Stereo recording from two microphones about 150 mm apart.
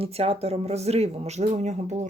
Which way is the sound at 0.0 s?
40° right (ahead or behind).